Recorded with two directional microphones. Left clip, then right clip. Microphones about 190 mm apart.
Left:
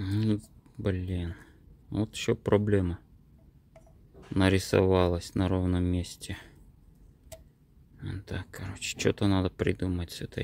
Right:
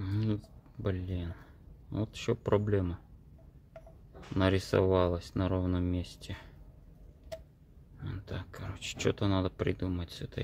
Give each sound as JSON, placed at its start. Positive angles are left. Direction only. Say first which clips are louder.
{"t": 0.0, "sound": "a sound", "louder": "left 5 dB", "side_deg": 40}
{"t": 1.9, "sound": "speech", "louder": "left 4 dB", "side_deg": 40}
{"t": 4.4, "sound": "speech", "louder": "left 3 dB", "side_deg": 40}
{"t": 8.0, "sound": "speech", "louder": "left 4 dB", "side_deg": 35}